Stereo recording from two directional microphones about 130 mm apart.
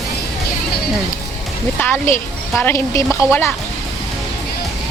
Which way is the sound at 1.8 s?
15° left (ahead or behind).